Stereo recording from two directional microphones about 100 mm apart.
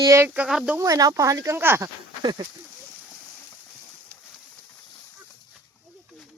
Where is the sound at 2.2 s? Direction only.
45° right (ahead or behind).